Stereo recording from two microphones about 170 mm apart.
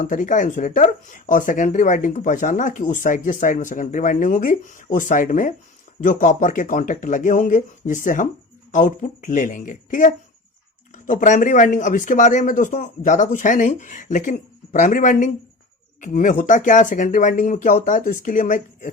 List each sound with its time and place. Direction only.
0.0 s speech: 50° left (ahead or behind)